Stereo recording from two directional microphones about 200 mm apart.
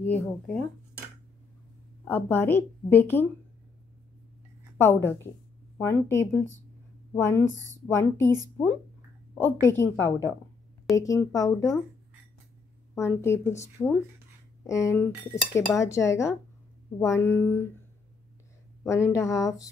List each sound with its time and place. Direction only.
0.0 s a woman's voice: 5° left (ahead or behind)
2.0 s a woman's voice: 10° left (ahead or behind)
4.7 s a woman's voice: 10° left (ahead or behind)
12.9 s a woman's voice: 15° left (ahead or behind)
18.9 s a woman's voice: 15° left (ahead or behind)